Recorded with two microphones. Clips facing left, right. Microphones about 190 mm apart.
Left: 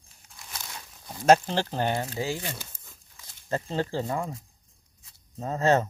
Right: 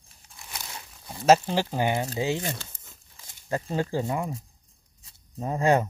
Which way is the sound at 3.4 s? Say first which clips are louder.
Right 1 dB; 15° right (ahead or behind).